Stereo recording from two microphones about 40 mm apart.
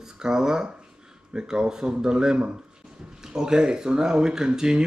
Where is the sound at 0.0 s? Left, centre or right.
Centre.